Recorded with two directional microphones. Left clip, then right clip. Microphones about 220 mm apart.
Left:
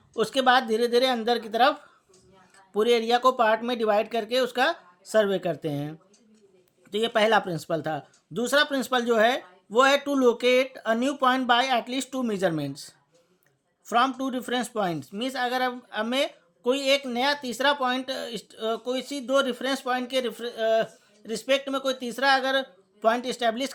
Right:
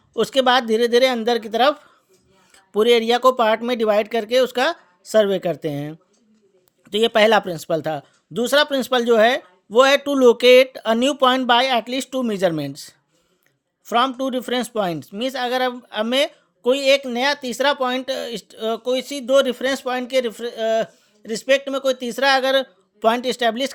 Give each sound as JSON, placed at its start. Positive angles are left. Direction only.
{"t": 0.1, "sound": "speech", "side_deg": -35}